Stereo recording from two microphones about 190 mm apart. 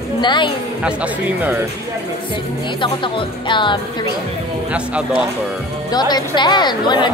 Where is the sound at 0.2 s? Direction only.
25° left (ahead or behind).